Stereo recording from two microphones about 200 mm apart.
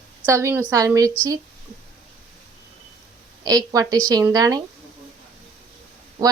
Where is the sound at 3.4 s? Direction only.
20° right (ahead or behind).